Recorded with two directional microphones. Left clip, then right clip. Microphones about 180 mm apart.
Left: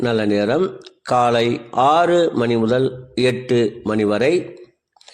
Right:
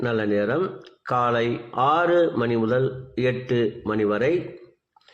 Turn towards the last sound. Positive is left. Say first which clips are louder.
# left 5 dB
turn(degrees=40)  # may be behind; listen again after turning